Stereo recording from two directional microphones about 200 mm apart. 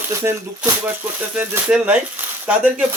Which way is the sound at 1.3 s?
10° right (ahead or behind).